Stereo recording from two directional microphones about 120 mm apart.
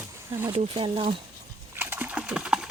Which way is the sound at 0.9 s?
55° right (ahead or behind).